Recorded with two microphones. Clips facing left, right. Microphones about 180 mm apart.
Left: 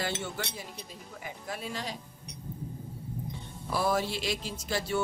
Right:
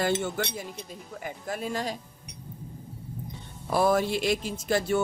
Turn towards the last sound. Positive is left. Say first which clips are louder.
# right 6 dB
turn(degrees=-50)  # may be behind; listen again after turning